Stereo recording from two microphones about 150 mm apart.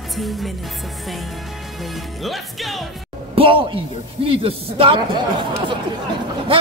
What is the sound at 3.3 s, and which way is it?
A man's voice, 35° right (ahead or behind).